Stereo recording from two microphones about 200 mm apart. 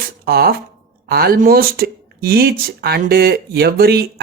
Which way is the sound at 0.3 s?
50° right (ahead or behind).